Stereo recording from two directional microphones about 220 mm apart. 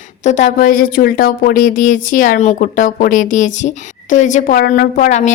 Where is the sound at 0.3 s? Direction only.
35° left (ahead or behind).